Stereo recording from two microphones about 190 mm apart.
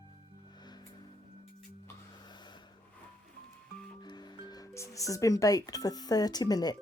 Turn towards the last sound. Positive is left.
turn(degrees=20)  # may be behind; listen again after turning